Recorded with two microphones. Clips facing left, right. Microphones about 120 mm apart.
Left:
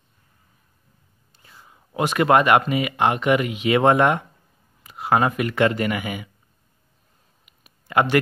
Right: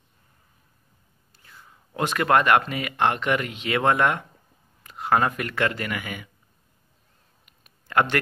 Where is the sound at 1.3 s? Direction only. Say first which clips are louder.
Left 1 dB; 20° left (ahead or behind).